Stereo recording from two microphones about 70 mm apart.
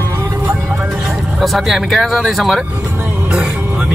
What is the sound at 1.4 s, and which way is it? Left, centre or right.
Speech, centre.